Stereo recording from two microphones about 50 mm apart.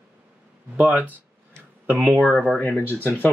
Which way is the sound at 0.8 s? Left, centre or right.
Right.